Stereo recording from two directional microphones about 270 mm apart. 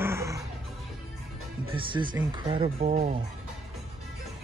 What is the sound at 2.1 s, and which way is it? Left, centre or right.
Speech, centre.